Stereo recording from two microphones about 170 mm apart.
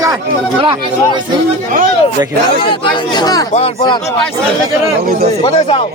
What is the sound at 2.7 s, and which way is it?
Speech, 25° left (ahead or behind).